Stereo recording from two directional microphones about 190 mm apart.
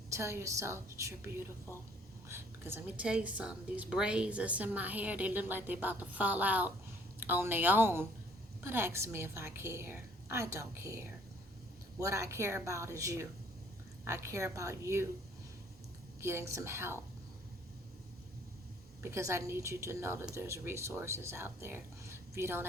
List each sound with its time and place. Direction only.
0.1 s a woman's voice: 15° right (ahead or behind)
2.3 s a woman's voice: 10° right (ahead or behind)
16.2 s a woman's voice: 15° right (ahead or behind)
19.0 s a woman's voice: 15° right (ahead or behind)